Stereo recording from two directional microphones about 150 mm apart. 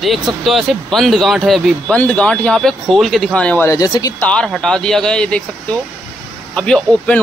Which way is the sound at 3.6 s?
25° left (ahead or behind).